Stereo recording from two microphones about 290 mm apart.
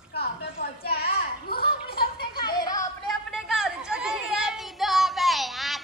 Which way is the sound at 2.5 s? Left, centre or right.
Centre.